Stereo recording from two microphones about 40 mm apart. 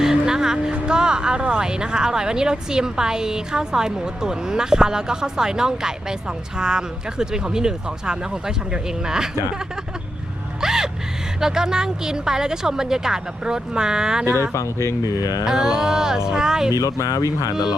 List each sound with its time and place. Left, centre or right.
0.0 s speech: centre
10.6 s gasp: centre
11.3 s speech: centre
15.4 s speech: centre